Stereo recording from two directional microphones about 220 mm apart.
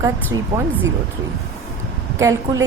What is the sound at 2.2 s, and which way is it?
Speech, 15° right (ahead or behind).